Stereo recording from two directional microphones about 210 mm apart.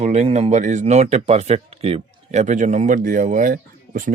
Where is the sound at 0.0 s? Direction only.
30° right (ahead or behind).